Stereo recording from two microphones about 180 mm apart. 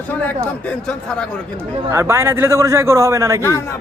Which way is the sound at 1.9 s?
15° right (ahead or behind).